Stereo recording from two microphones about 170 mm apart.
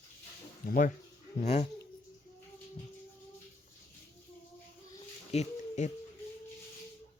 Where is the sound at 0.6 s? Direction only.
50° left (ahead or behind).